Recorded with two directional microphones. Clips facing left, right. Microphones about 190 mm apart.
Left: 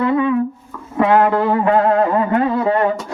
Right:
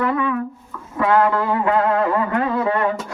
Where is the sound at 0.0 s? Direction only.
25° left (ahead or behind).